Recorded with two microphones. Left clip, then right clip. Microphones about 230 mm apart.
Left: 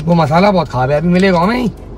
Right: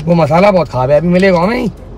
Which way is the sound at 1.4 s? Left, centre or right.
Left.